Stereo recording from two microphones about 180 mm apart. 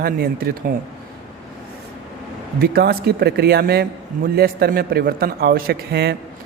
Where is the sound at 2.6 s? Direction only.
65° right (ahead or behind).